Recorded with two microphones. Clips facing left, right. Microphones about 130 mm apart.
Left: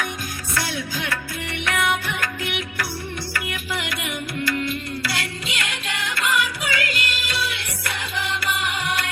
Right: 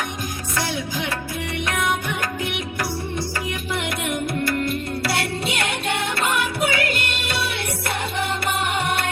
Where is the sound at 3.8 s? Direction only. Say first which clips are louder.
Right 5 dB; 50° right (ahead or behind).